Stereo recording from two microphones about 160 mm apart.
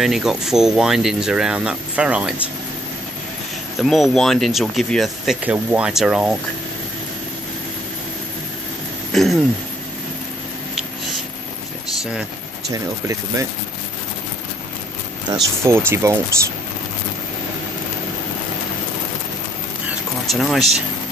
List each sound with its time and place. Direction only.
0.0 s speech: centre (ahead or behind)
3.8 s speech: centre (ahead or behind)
9.1 s a sound: centre (ahead or behind)
12.0 s speech: 5° right (ahead or behind)
12.7 s speech: 20° right (ahead or behind)
15.3 s speech: 25° right (ahead or behind)
19.9 s a sound: centre (ahead or behind)